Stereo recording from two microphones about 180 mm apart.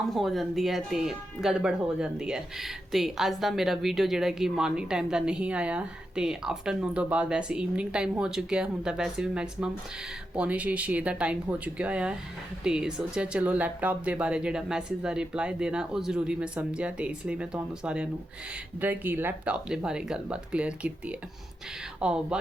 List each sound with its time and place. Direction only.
0.0 s speech: centre (ahead or behind)